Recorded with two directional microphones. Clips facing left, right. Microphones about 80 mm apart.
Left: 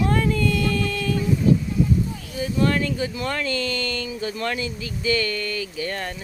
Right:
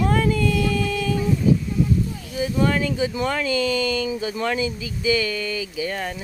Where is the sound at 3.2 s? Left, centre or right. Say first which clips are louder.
Right 5 dB; centre.